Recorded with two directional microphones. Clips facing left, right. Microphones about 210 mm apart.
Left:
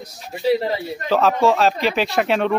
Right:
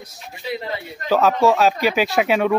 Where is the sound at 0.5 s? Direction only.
35° left (ahead or behind).